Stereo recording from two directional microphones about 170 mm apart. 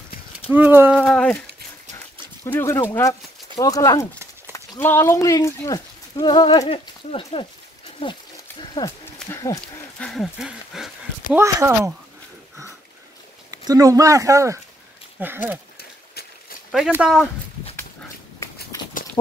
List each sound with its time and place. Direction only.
0.5 s speech: 10° right (ahead or behind)
1.0 s a sound: 5° left (ahead or behind)
2.4 s speech: 15° left (ahead or behind); by 7.4 s 35° left (ahead or behind)
8.0 s a sound: 30° left (ahead or behind)
9.3 s speech: 20° left (ahead or behind)
9.9 s speech: 5° left (ahead or behind)
11.3 s speech: 15° right (ahead or behind)
13.5 s speech: 20° right (ahead or behind)
15.8 s horse: 65° left (ahead or behind)
17.0 s speech: 5° right (ahead or behind)